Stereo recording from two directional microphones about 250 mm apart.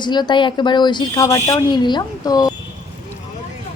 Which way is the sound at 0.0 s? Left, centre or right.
Centre.